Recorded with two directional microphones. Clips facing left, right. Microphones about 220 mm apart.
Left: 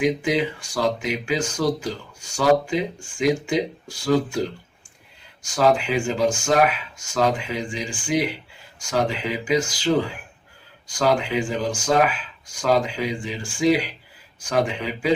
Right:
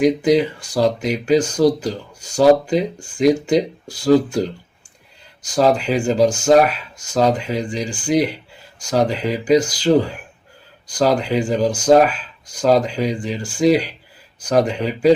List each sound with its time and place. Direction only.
0.0 s speech: 40° right (ahead or behind)